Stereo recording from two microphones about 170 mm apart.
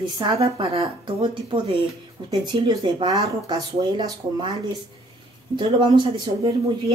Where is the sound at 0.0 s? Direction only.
25° right (ahead or behind).